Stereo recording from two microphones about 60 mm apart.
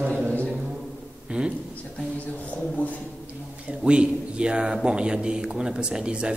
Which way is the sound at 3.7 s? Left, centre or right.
Centre.